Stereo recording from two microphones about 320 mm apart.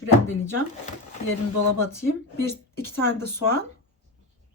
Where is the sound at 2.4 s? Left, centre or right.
Centre.